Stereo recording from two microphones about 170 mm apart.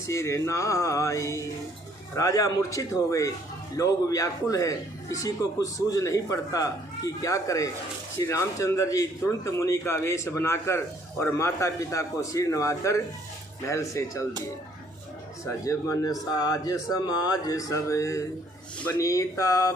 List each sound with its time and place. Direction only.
0.1 s a man's voice: 15° left (ahead or behind)
15.4 s a man's voice: 20° left (ahead or behind)